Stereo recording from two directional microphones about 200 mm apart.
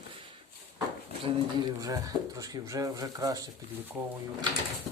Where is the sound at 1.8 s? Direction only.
15° right (ahead or behind).